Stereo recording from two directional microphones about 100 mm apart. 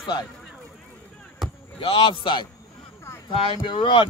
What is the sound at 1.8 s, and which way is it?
Speech, 65° left (ahead or behind).